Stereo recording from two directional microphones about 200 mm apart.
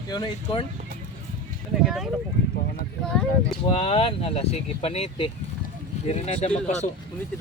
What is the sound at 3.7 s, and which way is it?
Speech, 30° left (ahead or behind).